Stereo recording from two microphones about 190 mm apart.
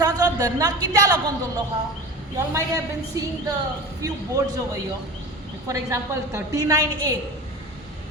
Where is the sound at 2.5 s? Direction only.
15° right (ahead or behind).